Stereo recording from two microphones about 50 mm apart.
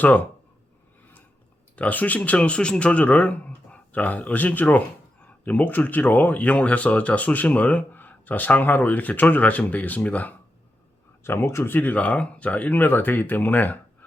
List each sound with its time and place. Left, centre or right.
0.0 s speech: left
1.7 s speech: left
11.3 s speech: left
11.7 s speech: left